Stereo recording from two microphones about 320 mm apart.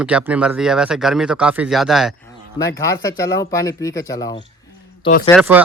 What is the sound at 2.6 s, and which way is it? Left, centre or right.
Speech, centre.